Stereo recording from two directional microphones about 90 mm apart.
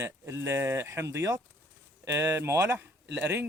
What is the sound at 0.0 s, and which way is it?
Speech, 30° right (ahead or behind).